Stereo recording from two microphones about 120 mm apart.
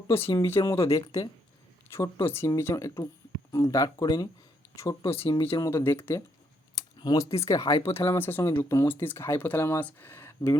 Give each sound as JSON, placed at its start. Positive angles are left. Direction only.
{"t": 0.1, "sound": "speech", "side_deg": 50}
{"t": 0.3, "sound": "speech", "side_deg": 20}
{"t": 5.0, "sound": "speech", "side_deg": 50}
{"t": 5.5, "sound": "speech", "side_deg": 25}
{"t": 7.0, "sound": "speech", "side_deg": 30}
{"t": 7.7, "sound": "speech", "side_deg": 55}
{"t": 8.0, "sound": "speech", "side_deg": 20}